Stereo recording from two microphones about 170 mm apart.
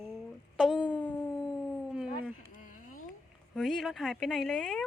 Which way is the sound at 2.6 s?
55° left (ahead or behind).